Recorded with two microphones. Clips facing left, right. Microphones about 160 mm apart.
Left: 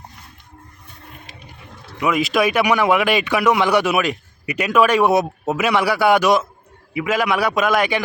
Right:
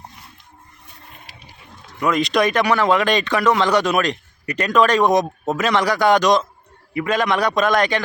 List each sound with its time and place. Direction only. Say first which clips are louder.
2.0 s speech: even; 5° left (ahead or behind)